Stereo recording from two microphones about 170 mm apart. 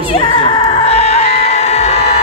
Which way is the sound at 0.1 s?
30° left (ahead or behind).